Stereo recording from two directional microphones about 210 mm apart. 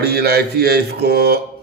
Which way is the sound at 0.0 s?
50° right (ahead or behind).